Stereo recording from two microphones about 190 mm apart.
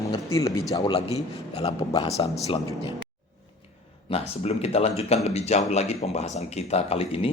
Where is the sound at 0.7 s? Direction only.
25° left (ahead or behind).